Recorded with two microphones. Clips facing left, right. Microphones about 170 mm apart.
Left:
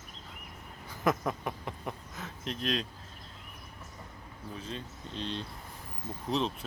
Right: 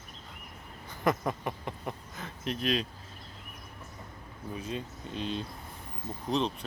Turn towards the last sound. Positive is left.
turn(degrees=0)  # may be behind; listen again after turning